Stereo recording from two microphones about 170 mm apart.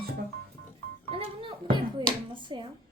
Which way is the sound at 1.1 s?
35° right (ahead or behind).